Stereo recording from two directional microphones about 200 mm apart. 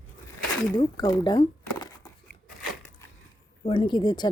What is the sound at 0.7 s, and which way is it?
Speech, 20° left (ahead or behind).